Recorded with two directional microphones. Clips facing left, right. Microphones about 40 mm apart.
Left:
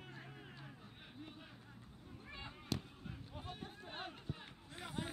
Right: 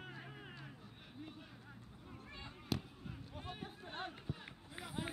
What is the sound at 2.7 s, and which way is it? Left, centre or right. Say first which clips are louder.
Fireworks: right 2 dB; centre.